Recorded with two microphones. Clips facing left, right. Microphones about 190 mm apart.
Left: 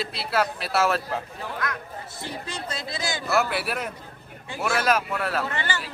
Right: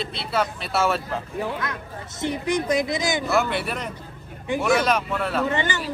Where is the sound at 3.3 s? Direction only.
5° left (ahead or behind).